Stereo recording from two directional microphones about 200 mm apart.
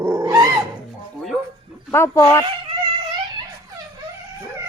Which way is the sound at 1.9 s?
15° left (ahead or behind).